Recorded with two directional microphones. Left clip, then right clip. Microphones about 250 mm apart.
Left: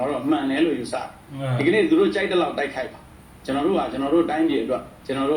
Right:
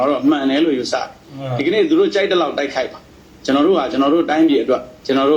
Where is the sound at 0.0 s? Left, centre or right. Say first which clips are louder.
Right 7 dB; right.